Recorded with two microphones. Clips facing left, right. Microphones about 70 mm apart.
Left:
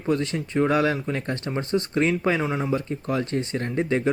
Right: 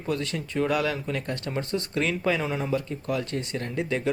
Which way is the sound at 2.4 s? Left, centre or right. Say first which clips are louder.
Left 3 dB; centre.